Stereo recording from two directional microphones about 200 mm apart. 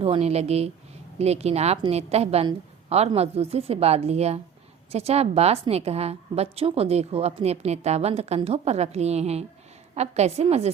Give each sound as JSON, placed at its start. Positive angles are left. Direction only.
{"t": 0.0, "sound": "a woman's voice", "side_deg": -30}